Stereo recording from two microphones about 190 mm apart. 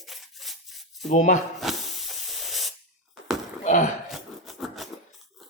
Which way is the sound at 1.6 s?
Centre (ahead or behind).